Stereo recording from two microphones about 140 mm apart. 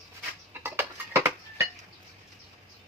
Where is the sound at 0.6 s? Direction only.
15° right (ahead or behind).